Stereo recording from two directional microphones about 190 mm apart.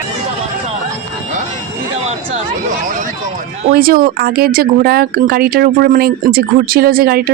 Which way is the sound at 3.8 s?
50° right (ahead or behind).